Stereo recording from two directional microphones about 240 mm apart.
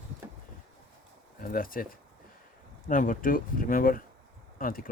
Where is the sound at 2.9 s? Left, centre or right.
Left.